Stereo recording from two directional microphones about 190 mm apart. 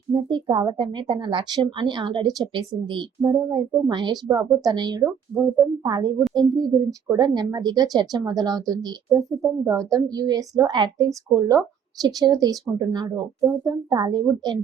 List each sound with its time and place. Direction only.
0.1 s a woman's voice: 25° right (ahead or behind)
5.3 s speech: centre (ahead or behind)
5.8 s a woman's voice: 20° right (ahead or behind)